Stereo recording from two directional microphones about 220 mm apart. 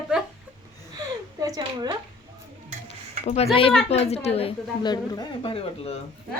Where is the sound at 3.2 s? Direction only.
30° left (ahead or behind).